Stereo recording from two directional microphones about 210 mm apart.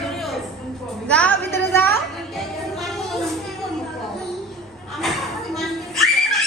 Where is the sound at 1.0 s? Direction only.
5° left (ahead or behind).